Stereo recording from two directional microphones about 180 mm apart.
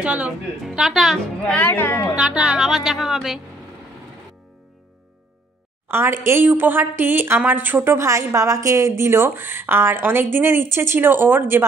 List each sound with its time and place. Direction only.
0.0 s a woman's voice: 5° right (ahead or behind); by 2.1 s 15° left (ahead or behind)
2.1 s a woman's voice: 5° right (ahead or behind)
5.9 s a woman's voice: 15° right (ahead or behind)